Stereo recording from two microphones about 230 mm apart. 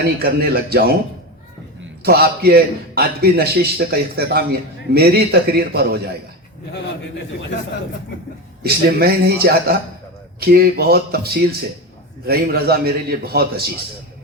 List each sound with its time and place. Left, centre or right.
0.0 s a man's voice: right
2.0 s a man's voice: right
8.6 s a man's voice: right